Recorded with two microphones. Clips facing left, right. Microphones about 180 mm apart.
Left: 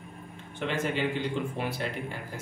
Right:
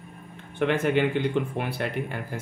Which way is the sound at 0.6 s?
60° right (ahead or behind).